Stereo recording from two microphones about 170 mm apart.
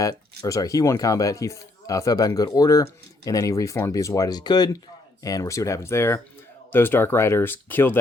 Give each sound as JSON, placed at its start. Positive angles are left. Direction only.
{"t": 0.0, "sound": "speech", "side_deg": 20}